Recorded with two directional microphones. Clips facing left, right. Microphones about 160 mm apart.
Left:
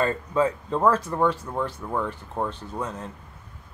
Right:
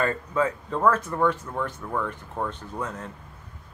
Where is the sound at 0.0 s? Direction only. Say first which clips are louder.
Left 2 dB; 25° left (ahead or behind).